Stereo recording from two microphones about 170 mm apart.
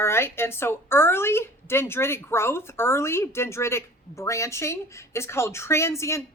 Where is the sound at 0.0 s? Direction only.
15° left (ahead or behind).